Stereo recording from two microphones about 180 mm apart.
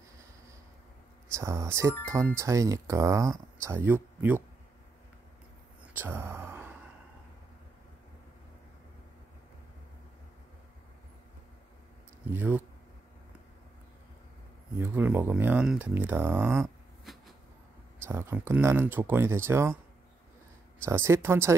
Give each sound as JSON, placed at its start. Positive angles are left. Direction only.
{"t": 1.3, "sound": "speech", "side_deg": -15}
{"t": 5.9, "sound": "a sound", "side_deg": -10}
{"t": 12.3, "sound": "speech", "side_deg": -10}
{"t": 14.8, "sound": "speech", "side_deg": -10}
{"t": 18.0, "sound": "speech", "side_deg": -15}
{"t": 20.8, "sound": "speech", "side_deg": -15}